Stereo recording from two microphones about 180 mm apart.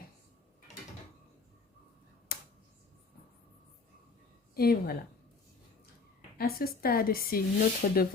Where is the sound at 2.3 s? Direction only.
55° left (ahead or behind).